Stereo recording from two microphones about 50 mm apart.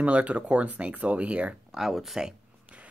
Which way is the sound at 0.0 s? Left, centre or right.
Right.